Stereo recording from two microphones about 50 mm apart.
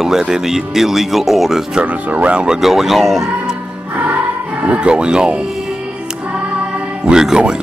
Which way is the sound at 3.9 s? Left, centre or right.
Right.